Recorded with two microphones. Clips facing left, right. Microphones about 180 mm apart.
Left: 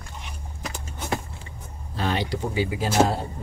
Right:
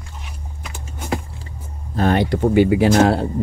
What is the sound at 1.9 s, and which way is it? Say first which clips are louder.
Speech: right 9 dB; 55° right (ahead or behind).